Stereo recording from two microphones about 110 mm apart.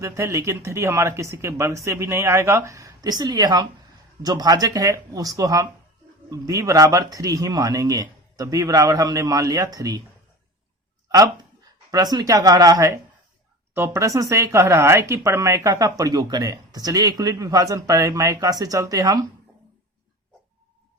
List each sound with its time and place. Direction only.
0.0 s speech: 25° right (ahead or behind)
11.9 s speech: 35° right (ahead or behind)